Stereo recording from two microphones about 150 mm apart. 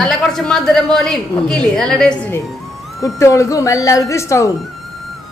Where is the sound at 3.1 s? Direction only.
20° left (ahead or behind).